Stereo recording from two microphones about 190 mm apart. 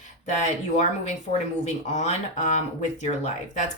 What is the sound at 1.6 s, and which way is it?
Speech, 40° left (ahead or behind).